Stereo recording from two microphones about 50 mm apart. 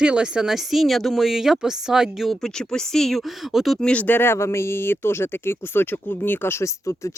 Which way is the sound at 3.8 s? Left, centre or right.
Left.